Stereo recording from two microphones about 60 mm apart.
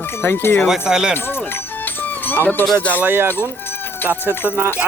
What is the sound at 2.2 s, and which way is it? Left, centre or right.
Speech, left.